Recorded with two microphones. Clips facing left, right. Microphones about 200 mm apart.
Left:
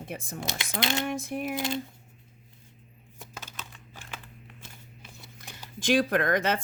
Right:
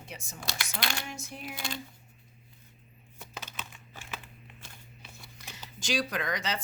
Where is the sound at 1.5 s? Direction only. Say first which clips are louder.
Left 7 dB; 20° left (ahead or behind).